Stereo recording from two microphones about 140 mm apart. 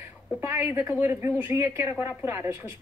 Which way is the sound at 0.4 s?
15° right (ahead or behind).